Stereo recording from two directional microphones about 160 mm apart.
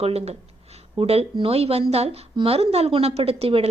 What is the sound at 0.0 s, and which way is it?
A woman's voice, 40° right (ahead or behind).